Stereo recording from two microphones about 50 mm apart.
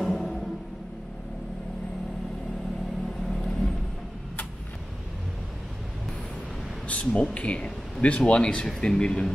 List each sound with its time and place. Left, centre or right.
0.0 s music: centre
3.3 s vehicle: centre
6.9 s speech: left